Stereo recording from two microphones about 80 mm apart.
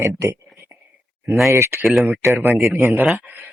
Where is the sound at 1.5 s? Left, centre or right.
Right.